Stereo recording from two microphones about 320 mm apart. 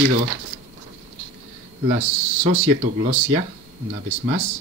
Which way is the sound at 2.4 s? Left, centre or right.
Right.